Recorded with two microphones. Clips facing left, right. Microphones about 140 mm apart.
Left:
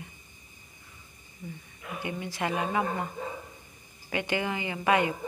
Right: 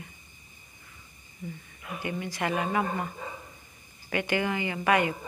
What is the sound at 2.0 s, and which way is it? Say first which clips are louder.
Speech: right 1 dB; 15° left (ahead or behind).